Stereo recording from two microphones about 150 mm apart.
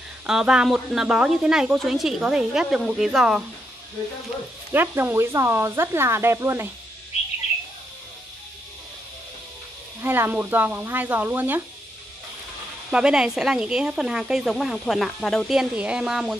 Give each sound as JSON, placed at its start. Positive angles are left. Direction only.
{"t": 0.3, "sound": "speech", "side_deg": -5}
{"t": 4.7, "sound": "speech", "side_deg": -15}
{"t": 10.0, "sound": "speech", "side_deg": -15}
{"t": 12.9, "sound": "speech", "side_deg": -5}